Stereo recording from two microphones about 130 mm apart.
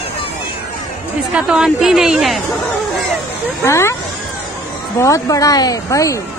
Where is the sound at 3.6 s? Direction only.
20° left (ahead or behind).